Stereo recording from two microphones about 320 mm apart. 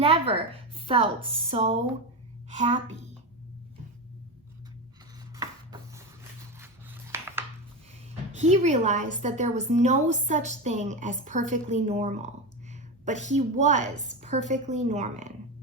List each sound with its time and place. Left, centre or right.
0.0 s a woman's voice: centre
5.4 s music: centre
6.6 s a sound: centre
8.4 s a woman's voice: right